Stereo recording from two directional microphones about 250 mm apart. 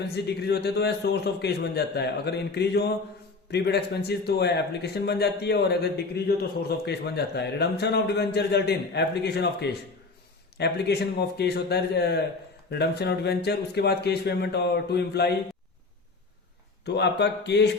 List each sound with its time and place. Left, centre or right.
0.3 s a man's voice: left
16.8 s speech: left